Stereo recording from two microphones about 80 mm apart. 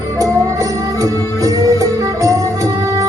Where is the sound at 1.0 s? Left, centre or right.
Right.